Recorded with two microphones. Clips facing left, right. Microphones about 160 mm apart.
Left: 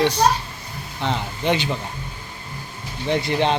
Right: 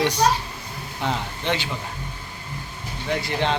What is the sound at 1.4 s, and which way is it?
Speech, 20° left (ahead or behind).